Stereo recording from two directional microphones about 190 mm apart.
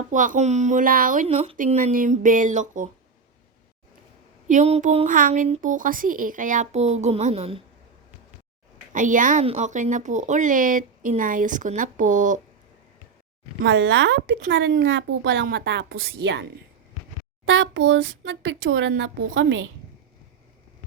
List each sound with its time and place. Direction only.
0.1 s speech: 40° right (ahead or behind)
4.4 s speech: 40° right (ahead or behind)
8.9 s speech: 40° right (ahead or behind)
13.7 s speech: 80° right
14.5 s a woman's voice: 70° right (ahead or behind)
17.4 s speech: 90° right